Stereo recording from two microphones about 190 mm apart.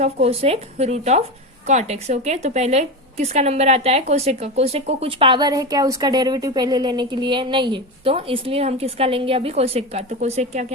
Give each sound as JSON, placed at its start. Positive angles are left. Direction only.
{"t": 0.0, "sound": "a woman's voice", "side_deg": -35}